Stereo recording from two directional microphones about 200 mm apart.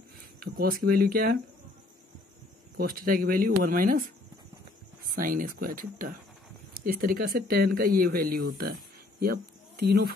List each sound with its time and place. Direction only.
0.6 s speech: 45° right (ahead or behind)
2.8 s speech: 45° right (ahead or behind)
5.1 s speech: 45° right (ahead or behind)